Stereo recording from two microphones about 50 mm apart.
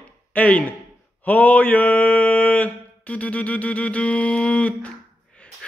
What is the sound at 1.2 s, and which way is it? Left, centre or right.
Mantra, left.